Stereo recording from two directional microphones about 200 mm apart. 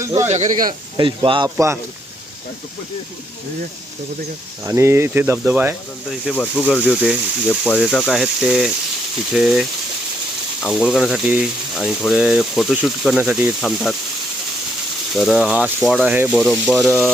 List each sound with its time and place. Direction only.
0.0 s speech: 15° right (ahead or behind)
0.3 s speech: 35° right (ahead or behind)
0.9 s speech: 25° right (ahead or behind)
1.5 s speech: 15° right (ahead or behind)
4.6 s speech: 15° right (ahead or behind)
6.1 s speech: 5° left (ahead or behind)
6.9 s speech: 5° right (ahead or behind)
15.1 s speech: centre (ahead or behind)